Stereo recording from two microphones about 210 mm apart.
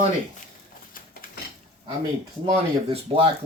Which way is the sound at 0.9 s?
40° left (ahead or behind).